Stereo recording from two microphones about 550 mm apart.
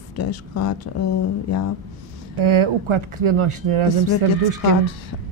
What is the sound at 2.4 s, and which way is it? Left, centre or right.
Speech, right.